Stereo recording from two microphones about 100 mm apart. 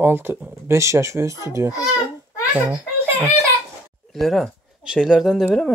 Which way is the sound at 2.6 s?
15° right (ahead or behind).